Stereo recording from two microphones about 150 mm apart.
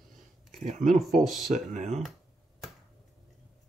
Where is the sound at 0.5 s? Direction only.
55° right (ahead or behind).